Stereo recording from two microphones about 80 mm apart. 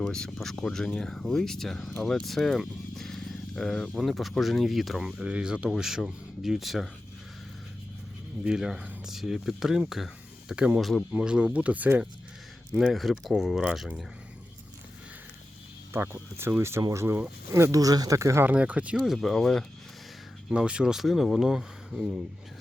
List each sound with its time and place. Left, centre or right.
0.0 s speech: centre
8.4 s speech: centre
11.1 s speech: centre
12.8 s speech: centre
16.4 s speech: right
17.7 s speech: right
18.4 s speech: centre
19.0 s speech: centre
20.5 s speech: centre